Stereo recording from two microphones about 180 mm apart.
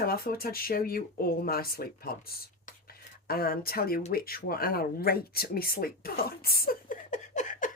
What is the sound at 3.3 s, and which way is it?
Speech, 55° left (ahead or behind).